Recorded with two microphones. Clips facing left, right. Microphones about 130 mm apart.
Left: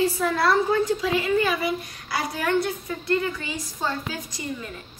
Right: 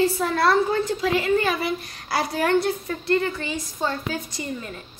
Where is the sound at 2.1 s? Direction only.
35° right (ahead or behind).